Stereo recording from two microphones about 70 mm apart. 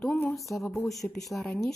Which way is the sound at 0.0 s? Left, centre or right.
Left.